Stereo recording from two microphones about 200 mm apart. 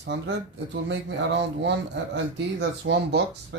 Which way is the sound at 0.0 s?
60° right (ahead or behind).